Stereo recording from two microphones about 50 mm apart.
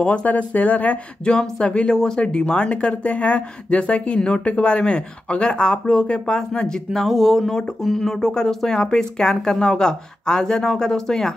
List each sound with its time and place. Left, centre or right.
0.0 s speech: left
1.3 s speech: centre
6.9 s speech: centre